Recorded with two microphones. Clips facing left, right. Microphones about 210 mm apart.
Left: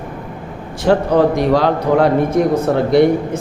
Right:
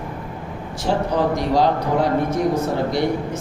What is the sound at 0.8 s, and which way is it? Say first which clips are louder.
Speech: left 7 dB; 60° left (ahead or behind).